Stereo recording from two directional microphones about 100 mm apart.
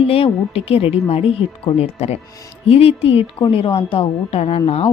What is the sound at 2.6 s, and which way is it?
A woman's voice, 75° left (ahead or behind).